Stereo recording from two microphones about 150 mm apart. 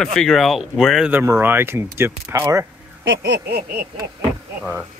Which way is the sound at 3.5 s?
90° right.